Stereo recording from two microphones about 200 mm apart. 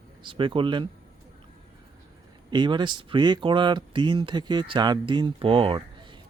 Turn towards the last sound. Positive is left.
turn(degrees=-25)  # may be behind; listen again after turning